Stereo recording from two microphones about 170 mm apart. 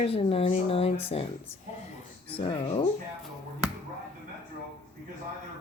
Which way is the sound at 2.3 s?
30° left (ahead or behind).